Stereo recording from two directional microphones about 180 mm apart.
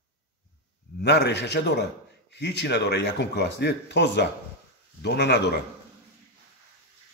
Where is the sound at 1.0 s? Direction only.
70° left (ahead or behind).